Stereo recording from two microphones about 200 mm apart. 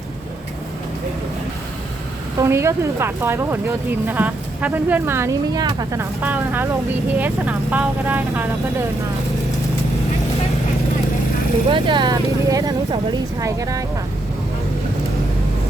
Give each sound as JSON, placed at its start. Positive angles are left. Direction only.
{"t": 2.4, "sound": "speech", "side_deg": -15}
{"t": 11.7, "sound": "speech", "side_deg": -25}